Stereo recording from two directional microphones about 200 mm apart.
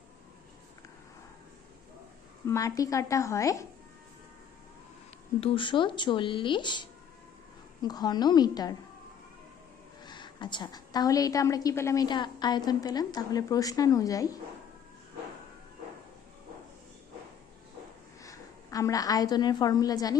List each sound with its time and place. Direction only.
2.5 s a woman's voice: 15° left (ahead or behind)
5.4 s a woman's voice: 25° left (ahead or behind)
7.9 s a woman's voice: 20° left (ahead or behind)
10.0 s a woman's voice: 20° left (ahead or behind)
18.2 s a woman's voice: 15° left (ahead or behind)